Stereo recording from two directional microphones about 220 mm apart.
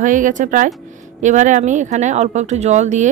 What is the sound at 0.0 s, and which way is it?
Speech, 35° right (ahead or behind).